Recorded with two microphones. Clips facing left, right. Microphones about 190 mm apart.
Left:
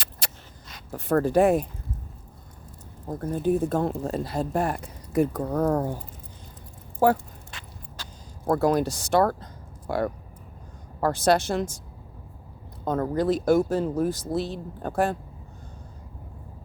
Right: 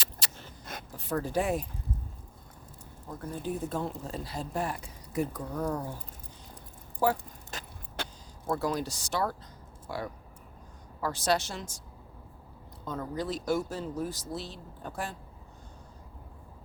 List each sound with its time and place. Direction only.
0.2 s a sound: 55° left (ahead or behind)
0.9 s speech: 60° left (ahead or behind)
3.1 s speech: 50° left (ahead or behind)
7.0 s speech: 55° left (ahead or behind)
7.5 s vehicle: 40° right (ahead or behind)
8.0 s vehicle: 60° right (ahead or behind)
8.4 s speech: 55° left (ahead or behind)
12.8 s speech: 55° left (ahead or behind)